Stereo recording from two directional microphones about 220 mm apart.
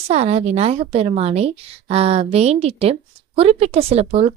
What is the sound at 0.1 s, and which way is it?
A woman's voice, 30° right (ahead or behind).